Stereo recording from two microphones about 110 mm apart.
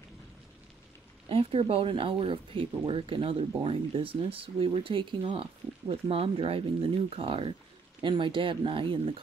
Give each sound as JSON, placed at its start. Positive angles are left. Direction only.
{"t": 1.3, "sound": "speech", "side_deg": -60}